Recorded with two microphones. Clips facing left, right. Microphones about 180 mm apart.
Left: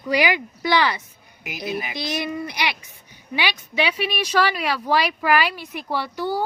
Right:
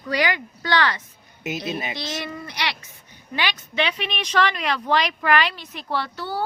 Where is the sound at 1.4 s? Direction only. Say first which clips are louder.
Right 1 dB; 25° right (ahead or behind).